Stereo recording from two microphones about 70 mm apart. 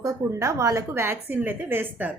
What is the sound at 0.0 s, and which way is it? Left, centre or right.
Speech, right.